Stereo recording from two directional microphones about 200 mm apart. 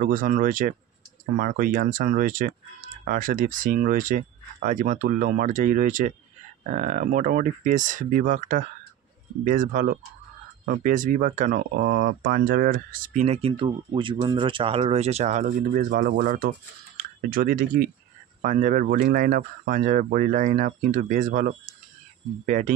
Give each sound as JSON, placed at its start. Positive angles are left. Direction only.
{"t": 0.0, "sound": "speech", "side_deg": -45}